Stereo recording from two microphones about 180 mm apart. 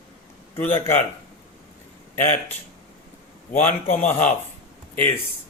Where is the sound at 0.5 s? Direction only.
15° left (ahead or behind).